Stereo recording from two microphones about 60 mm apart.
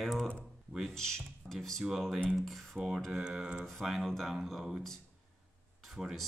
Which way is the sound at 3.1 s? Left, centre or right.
Centre.